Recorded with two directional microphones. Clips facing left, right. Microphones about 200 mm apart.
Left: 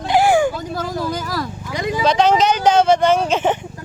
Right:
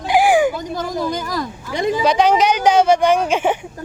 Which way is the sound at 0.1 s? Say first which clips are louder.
Right 1 dB; 15° right (ahead or behind).